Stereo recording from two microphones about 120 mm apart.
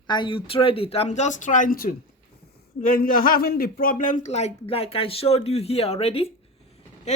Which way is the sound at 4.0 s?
90° left.